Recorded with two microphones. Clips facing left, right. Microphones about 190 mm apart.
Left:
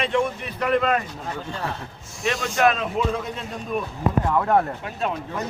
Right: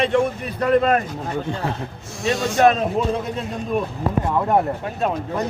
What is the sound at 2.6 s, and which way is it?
Speech, 35° right (ahead or behind).